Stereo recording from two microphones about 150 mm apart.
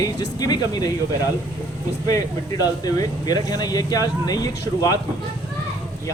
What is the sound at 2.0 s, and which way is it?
Speech, 25° left (ahead or behind).